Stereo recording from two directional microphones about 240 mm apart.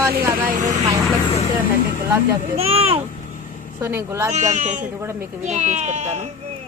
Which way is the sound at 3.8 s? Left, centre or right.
Centre.